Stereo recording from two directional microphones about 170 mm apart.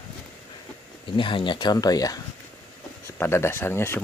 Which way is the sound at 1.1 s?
30° left (ahead or behind).